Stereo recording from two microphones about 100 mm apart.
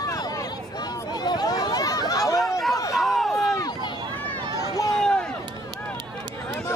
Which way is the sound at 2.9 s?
Centre (ahead or behind).